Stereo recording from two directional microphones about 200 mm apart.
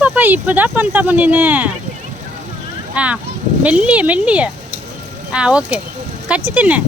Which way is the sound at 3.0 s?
5° right (ahead or behind).